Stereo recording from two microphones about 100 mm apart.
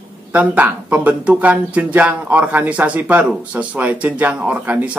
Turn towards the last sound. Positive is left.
turn(degrees=-15)  # may be behind; listen again after turning